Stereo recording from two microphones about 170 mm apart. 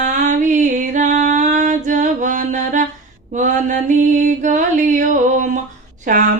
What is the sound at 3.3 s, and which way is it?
Mantra, 50° right (ahead or behind).